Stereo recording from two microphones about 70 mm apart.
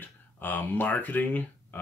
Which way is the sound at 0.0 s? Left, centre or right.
Left.